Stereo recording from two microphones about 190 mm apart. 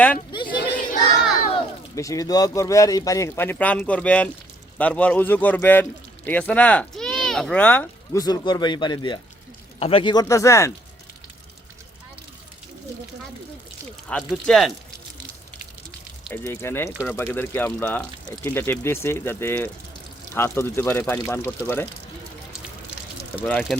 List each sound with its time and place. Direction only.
0.4 s children playing: 50° left (ahead or behind)
2.0 s speech: 15° left (ahead or behind)
8.2 s speech: 20° left (ahead or behind)
14.1 s speech: 5° left (ahead or behind)
16.3 s speech: 10° left (ahead or behind)
23.3 s speech: 5° left (ahead or behind)